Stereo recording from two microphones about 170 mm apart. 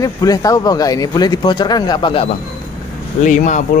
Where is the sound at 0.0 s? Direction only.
20° left (ahead or behind).